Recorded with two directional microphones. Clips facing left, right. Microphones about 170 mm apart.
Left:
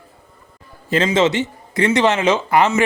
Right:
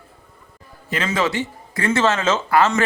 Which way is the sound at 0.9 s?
30° left (ahead or behind).